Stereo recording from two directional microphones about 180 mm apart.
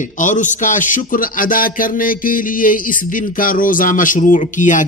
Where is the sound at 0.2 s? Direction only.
45° left (ahead or behind).